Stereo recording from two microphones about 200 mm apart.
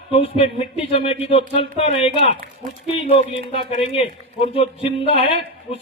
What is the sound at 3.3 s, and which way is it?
Speech, 30° left (ahead or behind).